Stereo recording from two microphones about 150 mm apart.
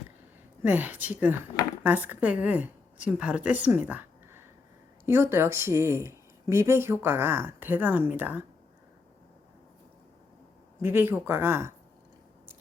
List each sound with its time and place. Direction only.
0.6 s a woman's voice: 10° right (ahead or behind)
10.8 s a woman's voice: 15° right (ahead or behind)